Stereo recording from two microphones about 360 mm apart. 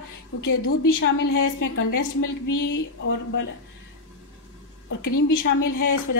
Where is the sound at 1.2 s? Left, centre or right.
Left.